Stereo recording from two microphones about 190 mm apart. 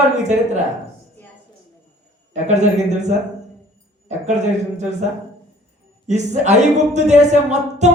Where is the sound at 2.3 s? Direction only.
40° right (ahead or behind).